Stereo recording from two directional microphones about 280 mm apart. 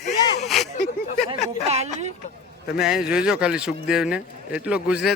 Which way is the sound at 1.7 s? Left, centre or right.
Right.